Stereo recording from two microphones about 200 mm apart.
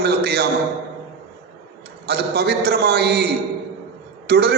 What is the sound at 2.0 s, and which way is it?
A man's voice, 55° right (ahead or behind).